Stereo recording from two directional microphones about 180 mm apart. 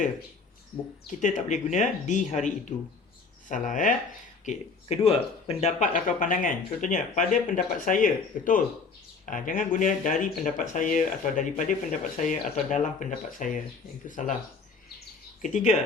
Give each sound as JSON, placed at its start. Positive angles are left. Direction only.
{"t": 1.2, "sound": "speech", "side_deg": 40}
{"t": 4.4, "sound": "speech", "side_deg": 35}
{"t": 15.4, "sound": "speech", "side_deg": 45}